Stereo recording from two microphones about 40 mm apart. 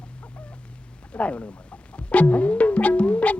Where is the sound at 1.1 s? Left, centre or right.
Left.